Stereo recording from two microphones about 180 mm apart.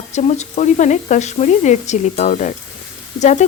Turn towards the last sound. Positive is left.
turn(degrees=40)  # may be behind; listen again after turning